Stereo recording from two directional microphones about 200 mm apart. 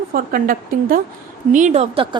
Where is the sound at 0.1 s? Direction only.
45° right (ahead or behind).